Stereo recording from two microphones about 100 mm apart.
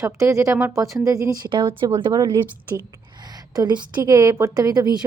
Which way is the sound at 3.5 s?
45° right (ahead or behind).